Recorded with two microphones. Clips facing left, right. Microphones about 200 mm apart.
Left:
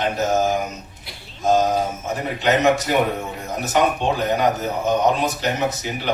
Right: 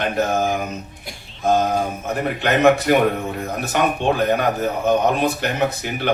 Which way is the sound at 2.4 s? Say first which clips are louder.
Right 2 dB; 60° right (ahead or behind).